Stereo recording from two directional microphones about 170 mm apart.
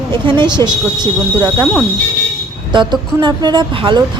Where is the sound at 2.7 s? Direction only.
25° right (ahead or behind).